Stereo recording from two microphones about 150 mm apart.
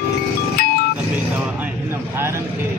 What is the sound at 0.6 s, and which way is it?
Music, 90° left.